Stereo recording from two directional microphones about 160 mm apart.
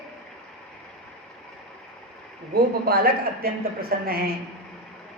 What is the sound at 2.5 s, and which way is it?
A woman's voice, 70° right (ahead or behind).